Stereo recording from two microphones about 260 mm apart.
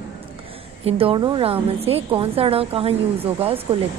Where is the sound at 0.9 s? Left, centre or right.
Right.